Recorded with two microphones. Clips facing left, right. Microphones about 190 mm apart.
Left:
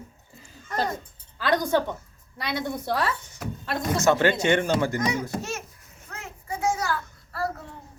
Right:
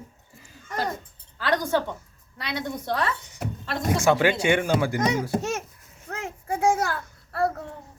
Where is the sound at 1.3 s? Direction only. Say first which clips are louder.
Left 1 dB; 15° left (ahead or behind).